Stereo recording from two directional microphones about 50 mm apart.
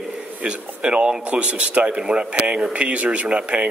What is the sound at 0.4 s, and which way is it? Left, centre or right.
Speech, right.